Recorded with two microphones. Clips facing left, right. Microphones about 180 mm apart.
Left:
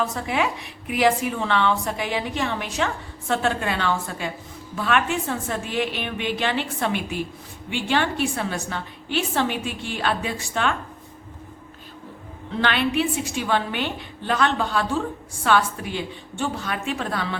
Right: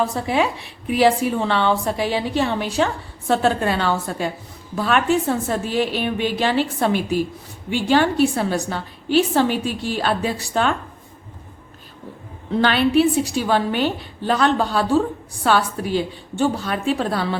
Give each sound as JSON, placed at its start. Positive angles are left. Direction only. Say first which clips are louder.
{"t": 0.0, "sound": "a woman's voice", "louder": "right 4 dB", "side_deg": -30}
{"t": 12.6, "sound": "a woman's voice", "louder": "right 6 dB", "side_deg": -35}